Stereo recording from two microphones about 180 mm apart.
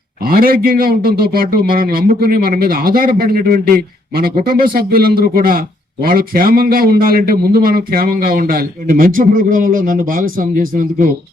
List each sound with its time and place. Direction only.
0.3 s a man's voice: 55° right (ahead or behind)